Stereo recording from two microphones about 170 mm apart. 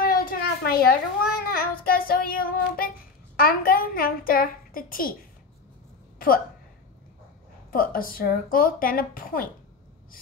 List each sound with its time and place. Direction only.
0.0 s a sound: 60° left (ahead or behind)
1.4 s speech: 60° left (ahead or behind)
6.1 s a woman's voice: 55° left (ahead or behind)
7.7 s speech: 55° left (ahead or behind)